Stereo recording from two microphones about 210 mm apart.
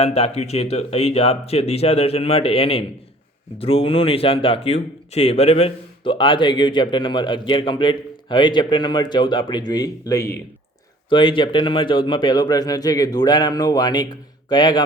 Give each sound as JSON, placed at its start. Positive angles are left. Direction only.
{"t": 0.0, "sound": "speech", "side_deg": 30}